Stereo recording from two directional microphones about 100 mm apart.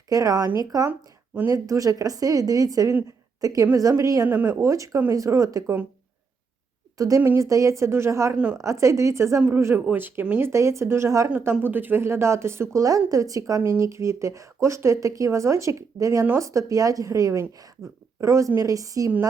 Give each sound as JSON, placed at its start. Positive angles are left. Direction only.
{"t": 0.1, "sound": "speech", "side_deg": -35}
{"t": 4.3, "sound": "speech", "side_deg": -20}
{"t": 4.6, "sound": "speech", "side_deg": -30}
{"t": 7.0, "sound": "a woman's voice", "side_deg": -35}
{"t": 10.5, "sound": "a woman's voice", "side_deg": -30}